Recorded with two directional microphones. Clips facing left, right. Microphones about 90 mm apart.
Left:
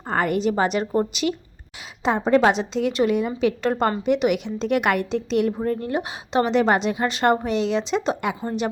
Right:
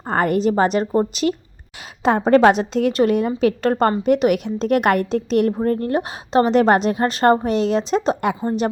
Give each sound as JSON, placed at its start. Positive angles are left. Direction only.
{"t": 0.1, "sound": "a woman's voice", "side_deg": -40}
{"t": 2.0, "sound": "a woman's voice", "side_deg": -50}